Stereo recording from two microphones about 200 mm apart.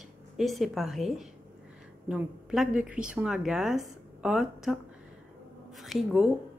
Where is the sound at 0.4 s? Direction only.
Centre (ahead or behind).